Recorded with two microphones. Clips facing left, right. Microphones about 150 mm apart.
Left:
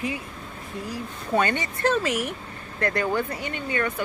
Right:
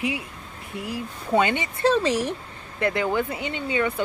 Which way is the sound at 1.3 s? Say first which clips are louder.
Right 2 dB; 15° right (ahead or behind).